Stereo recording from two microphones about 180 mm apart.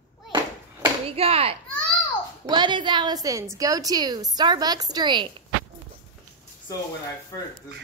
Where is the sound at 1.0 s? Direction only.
35° right (ahead or behind).